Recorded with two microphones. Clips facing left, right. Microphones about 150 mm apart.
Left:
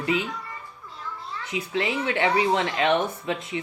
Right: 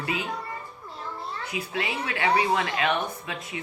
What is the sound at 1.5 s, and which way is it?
Speech, 25° left (ahead or behind).